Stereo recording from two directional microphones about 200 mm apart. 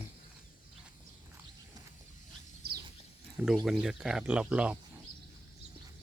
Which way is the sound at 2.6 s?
50° right (ahead or behind).